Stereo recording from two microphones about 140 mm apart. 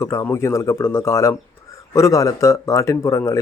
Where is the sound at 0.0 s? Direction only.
20° left (ahead or behind).